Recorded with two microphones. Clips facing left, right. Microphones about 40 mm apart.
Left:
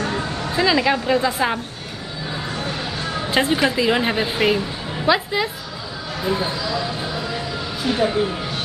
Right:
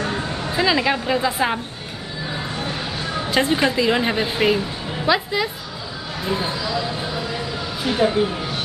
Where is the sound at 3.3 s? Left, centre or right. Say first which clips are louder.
Even; centre.